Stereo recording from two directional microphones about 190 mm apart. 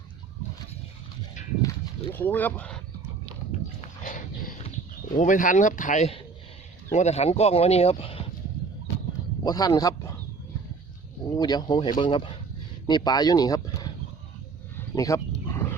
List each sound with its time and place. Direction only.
2.1 s speech: 10° left (ahead or behind)
4.0 s dog: 45° left (ahead or behind)
5.1 s speech: 40° left (ahead or behind)
9.4 s a sound: 20° left (ahead or behind)
11.3 s speech: 20° left (ahead or behind)
14.8 s wild animals: 15° left (ahead or behind)